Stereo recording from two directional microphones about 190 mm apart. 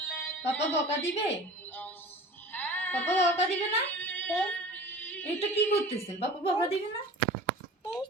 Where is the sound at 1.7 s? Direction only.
10° left (ahead or behind).